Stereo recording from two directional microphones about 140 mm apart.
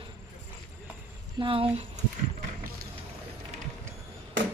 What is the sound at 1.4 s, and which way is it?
Speech, 40° right (ahead or behind).